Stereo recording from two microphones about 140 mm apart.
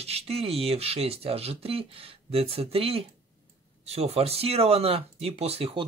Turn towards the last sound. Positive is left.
turn(degrees=-45)  # may be behind; listen again after turning